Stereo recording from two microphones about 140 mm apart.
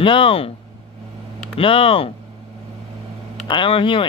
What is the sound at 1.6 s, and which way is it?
Speech, 40° left (ahead or behind).